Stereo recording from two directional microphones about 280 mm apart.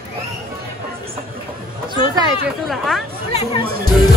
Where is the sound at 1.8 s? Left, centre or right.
Centre.